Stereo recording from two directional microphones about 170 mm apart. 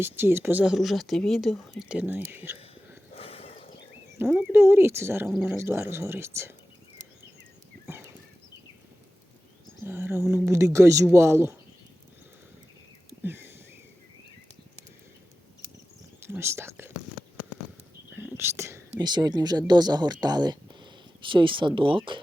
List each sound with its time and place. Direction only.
0.0 s speech: 15° right (ahead or behind)
2.0 s speech: 10° right (ahead or behind)
3.2 s horse: 35° left (ahead or behind)
4.2 s speech: 10° right (ahead or behind)
7.9 s horse: 15° right (ahead or behind)
9.8 s speech: 15° right (ahead or behind)
13.2 s a sound: 15° right (ahead or behind)
16.2 s speech: 15° right (ahead or behind)
18.2 s speech: 15° right (ahead or behind); by 22.2 s 30° right (ahead or behind)